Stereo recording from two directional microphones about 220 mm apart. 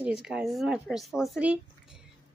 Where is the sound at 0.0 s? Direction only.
5° right (ahead or behind).